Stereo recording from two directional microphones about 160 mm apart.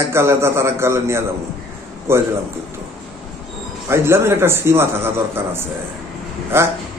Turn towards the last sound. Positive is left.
turn(degrees=-15)  # may be behind; listen again after turning